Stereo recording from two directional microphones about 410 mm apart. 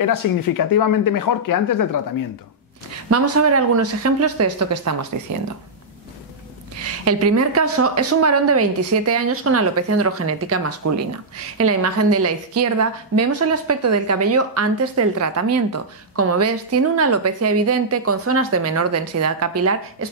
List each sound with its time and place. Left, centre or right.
0.0 s speech: left
3.1 s a woman's voice: right
7.1 s a woman's voice: right